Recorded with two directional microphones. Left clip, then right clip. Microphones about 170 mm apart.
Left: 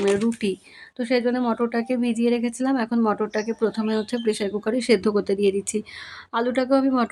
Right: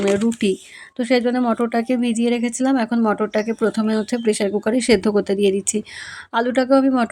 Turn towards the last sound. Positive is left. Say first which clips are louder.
# right 4 dB
turn(degrees=-20)  # may be behind; listen again after turning